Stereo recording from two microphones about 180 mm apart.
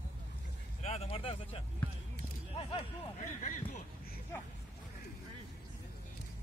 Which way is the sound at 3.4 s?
45° left (ahead or behind).